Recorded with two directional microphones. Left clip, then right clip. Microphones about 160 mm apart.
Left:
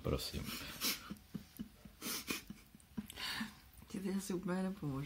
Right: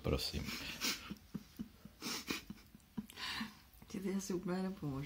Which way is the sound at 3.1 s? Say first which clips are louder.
Left 1 dB; 15° left (ahead or behind).